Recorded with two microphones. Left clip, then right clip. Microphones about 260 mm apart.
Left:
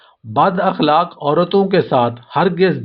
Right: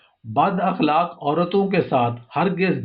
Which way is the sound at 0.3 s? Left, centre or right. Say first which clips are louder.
Left 5 dB; left.